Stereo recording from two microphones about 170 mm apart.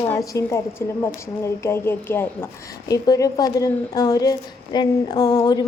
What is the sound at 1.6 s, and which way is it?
A woman's voice, 15° left (ahead or behind).